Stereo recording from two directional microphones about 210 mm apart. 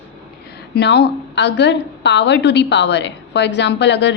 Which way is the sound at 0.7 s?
50° left (ahead or behind).